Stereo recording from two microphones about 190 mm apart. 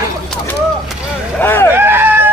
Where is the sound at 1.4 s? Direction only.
10° left (ahead or behind).